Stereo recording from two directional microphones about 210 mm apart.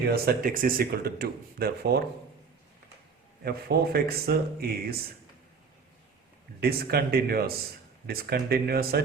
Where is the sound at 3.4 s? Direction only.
45° right (ahead or behind).